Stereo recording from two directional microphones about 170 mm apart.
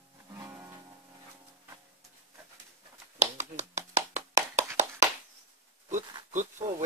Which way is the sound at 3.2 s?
45° right (ahead or behind).